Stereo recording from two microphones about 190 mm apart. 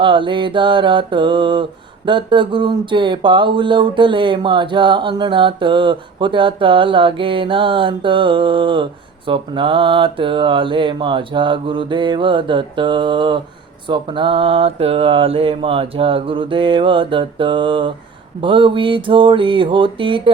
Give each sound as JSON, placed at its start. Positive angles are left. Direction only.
{"t": 0.0, "sound": "speech", "side_deg": -25}